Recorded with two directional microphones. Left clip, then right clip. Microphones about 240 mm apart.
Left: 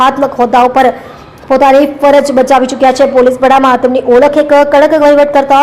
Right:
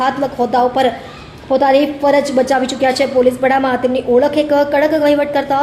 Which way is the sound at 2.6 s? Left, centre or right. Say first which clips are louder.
Left 7 dB; centre.